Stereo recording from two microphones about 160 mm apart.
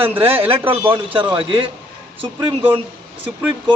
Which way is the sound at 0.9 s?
30° right (ahead or behind).